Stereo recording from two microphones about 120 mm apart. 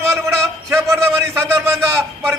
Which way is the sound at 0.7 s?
25° right (ahead or behind).